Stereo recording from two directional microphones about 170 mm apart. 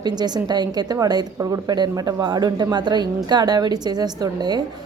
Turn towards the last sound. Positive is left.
turn(degrees=-25)  # may be behind; listen again after turning